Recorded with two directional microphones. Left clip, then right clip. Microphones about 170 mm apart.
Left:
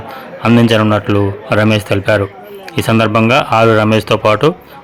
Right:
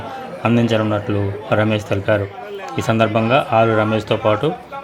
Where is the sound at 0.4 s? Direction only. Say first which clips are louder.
Left 7 dB; 20° left (ahead or behind).